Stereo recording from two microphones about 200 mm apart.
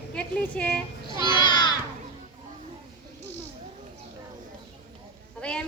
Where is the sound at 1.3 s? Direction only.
25° left (ahead or behind).